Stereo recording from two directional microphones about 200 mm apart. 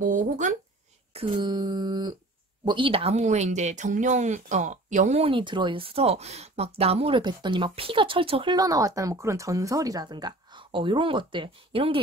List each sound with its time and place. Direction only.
0.0 s speech: 40° right (ahead or behind)
1.1 s speech: 20° right (ahead or behind)